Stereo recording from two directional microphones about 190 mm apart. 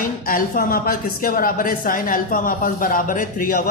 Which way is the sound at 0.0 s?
45° left (ahead or behind).